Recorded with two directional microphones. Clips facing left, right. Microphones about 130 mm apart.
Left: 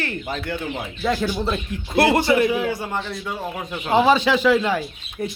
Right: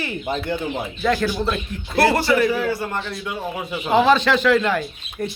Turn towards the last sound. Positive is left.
turn(degrees=5)  # may be behind; listen again after turning